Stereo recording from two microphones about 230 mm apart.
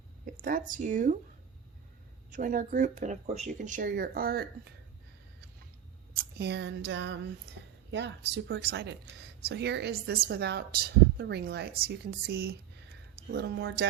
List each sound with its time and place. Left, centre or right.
0.4 s speech: right
2.3 s speech: right
6.4 s a woman's voice: right